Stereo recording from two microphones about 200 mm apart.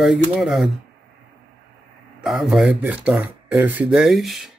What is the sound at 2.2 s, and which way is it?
Speech, centre (ahead or behind).